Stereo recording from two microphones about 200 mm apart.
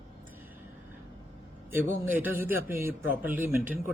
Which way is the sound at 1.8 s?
40° right (ahead or behind).